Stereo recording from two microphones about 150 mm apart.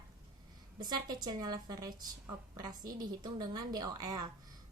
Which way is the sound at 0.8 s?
30° right (ahead or behind).